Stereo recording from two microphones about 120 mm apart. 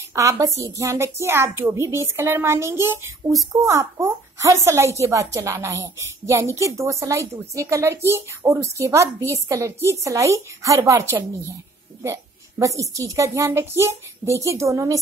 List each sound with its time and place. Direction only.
0.1 s speech: 25° right (ahead or behind)